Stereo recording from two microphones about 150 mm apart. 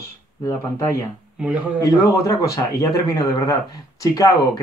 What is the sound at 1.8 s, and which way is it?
Speech, 20° left (ahead or behind).